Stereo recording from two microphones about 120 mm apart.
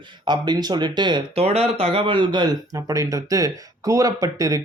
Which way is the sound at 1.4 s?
60° right (ahead or behind).